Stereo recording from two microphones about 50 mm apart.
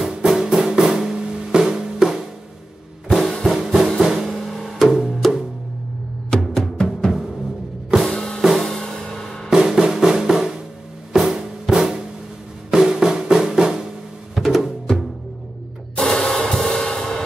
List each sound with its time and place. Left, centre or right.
0.3 s music: centre
3.4 s music: centre
6.3 s music: centre
8.1 s drum kit: centre
8.4 s music: centre
8.6 s music: centre
9.5 s drum: centre
11.1 s music: centre
16.0 s music: centre